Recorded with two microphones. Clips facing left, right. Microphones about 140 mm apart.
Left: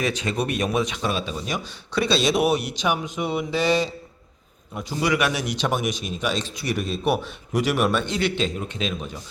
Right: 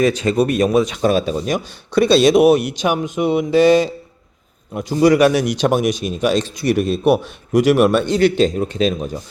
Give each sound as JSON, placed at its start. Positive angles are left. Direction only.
{"t": 0.0, "sound": "a man's voice", "side_deg": -45}
{"t": 4.9, "sound": "speech", "side_deg": -40}